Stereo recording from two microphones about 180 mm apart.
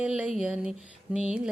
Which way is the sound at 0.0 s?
5° right (ahead or behind).